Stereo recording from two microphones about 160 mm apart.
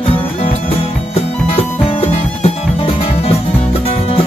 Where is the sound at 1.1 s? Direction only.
35° left (ahead or behind).